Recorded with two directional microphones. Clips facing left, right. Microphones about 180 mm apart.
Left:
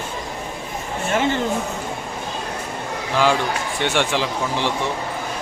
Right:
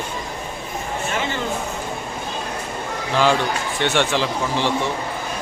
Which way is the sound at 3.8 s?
15° left (ahead or behind).